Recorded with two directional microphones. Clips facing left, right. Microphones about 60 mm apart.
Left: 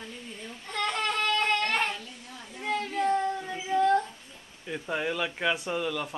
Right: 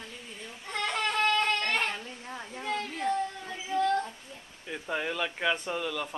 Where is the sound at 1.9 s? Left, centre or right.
Right.